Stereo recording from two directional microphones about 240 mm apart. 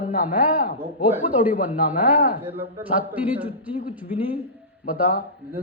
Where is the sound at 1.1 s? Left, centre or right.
Centre.